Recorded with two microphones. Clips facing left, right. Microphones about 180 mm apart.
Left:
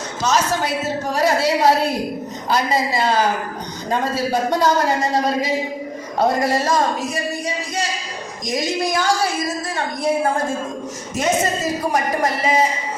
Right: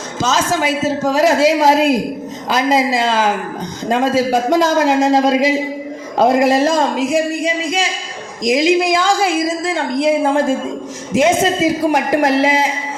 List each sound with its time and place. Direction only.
0.2 s a woman's voice: 90° right